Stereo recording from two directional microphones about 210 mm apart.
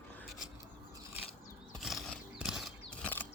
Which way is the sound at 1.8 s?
Centre (ahead or behind).